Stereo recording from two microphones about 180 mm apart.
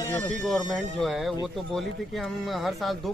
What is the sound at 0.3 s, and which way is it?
A man's voice, centre (ahead or behind).